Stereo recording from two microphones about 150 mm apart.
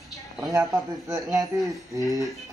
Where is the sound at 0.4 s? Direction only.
20° right (ahead or behind).